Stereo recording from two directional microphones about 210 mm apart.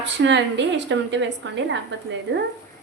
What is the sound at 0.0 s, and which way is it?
Speech, 55° right (ahead or behind).